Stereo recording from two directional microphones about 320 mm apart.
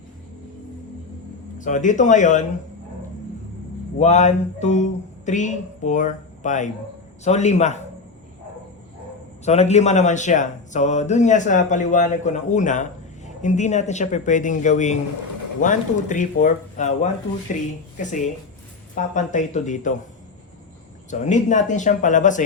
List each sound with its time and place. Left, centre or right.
1.6 s speech: left
4.0 s speech: left
9.4 s speech: centre
21.1 s speech: left